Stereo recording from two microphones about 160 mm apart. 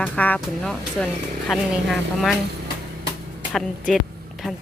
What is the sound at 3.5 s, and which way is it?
Speech, centre (ahead or behind).